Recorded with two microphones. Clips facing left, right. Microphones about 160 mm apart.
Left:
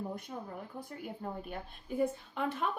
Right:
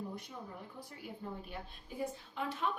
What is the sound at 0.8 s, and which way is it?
A woman's voice, 50° left (ahead or behind).